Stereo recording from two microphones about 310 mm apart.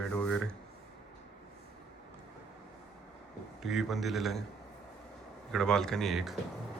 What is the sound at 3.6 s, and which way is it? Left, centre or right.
Speech, centre.